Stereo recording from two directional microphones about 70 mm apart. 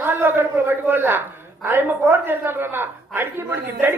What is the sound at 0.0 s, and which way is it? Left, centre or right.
A man's voice, right.